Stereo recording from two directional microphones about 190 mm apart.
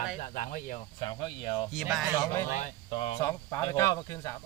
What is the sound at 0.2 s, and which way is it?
Speech, 45° left (ahead or behind).